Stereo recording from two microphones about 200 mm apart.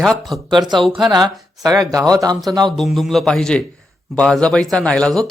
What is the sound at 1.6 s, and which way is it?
Speech, 15° right (ahead or behind).